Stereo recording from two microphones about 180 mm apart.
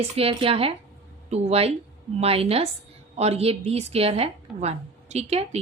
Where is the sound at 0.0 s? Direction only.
30° right (ahead or behind).